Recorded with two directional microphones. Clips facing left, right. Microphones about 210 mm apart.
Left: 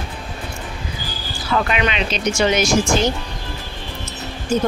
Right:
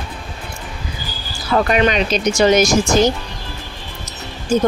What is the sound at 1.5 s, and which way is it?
Speech, 40° right (ahead or behind).